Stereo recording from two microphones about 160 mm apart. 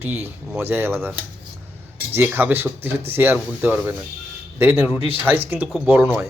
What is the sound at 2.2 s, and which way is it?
Speech, 15° right (ahead or behind).